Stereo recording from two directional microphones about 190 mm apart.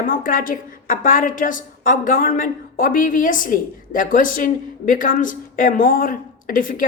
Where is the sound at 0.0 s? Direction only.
45° left (ahead or behind).